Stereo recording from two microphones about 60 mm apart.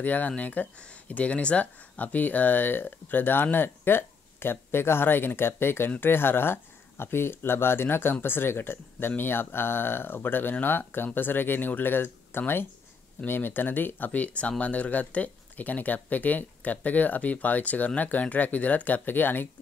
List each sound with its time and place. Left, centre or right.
0.0 s speech: left